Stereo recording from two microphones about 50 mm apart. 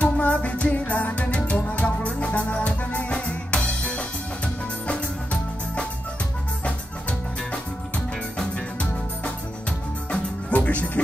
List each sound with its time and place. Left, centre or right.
0.0 s music: left
10.5 s music: left